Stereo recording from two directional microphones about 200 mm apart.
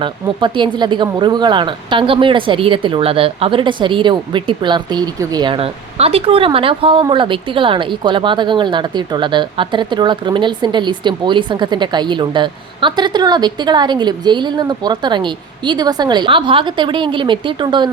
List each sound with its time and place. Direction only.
0.0 s speech: 25° right (ahead or behind)